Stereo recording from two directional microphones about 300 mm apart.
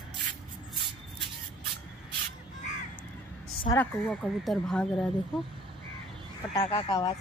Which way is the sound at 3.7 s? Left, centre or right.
Centre.